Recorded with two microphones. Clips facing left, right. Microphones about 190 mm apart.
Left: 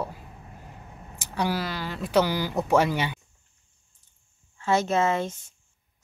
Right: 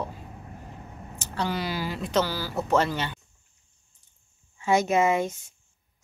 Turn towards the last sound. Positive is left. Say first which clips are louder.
# right 2 dB
turn(degrees=-10)  # may be behind; listen again after turning